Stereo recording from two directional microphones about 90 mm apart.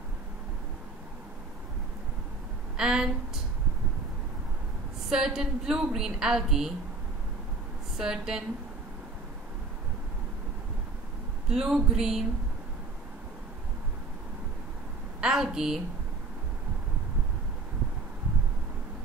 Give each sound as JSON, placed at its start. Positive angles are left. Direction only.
{"t": 2.8, "sound": "a woman's voice", "side_deg": -5}
{"t": 5.1, "sound": "a woman's voice", "side_deg": -5}
{"t": 8.0, "sound": "a woman's voice", "side_deg": -5}
{"t": 11.4, "sound": "a woman's voice", "side_deg": -5}
{"t": 15.1, "sound": "a woman's voice", "side_deg": -5}